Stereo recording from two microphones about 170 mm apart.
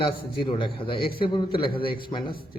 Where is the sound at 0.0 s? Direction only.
30° left (ahead or behind).